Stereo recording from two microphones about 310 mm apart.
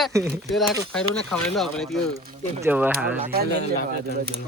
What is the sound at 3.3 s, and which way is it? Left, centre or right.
Speech, right.